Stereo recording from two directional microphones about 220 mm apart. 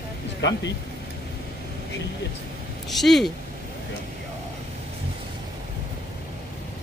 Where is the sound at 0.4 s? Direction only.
50° left (ahead or behind).